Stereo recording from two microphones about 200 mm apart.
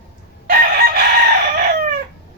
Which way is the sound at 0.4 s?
50° right (ahead or behind).